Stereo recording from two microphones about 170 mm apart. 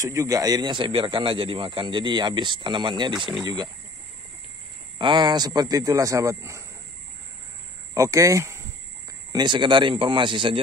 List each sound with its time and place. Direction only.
0.0 s speech: 20° right (ahead or behind)
4.9 s speech: 25° right (ahead or behind)
7.9 s speech: 20° right (ahead or behind)